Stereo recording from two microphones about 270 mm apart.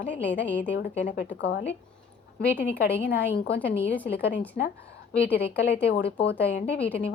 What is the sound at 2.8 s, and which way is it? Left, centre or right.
Speech, left.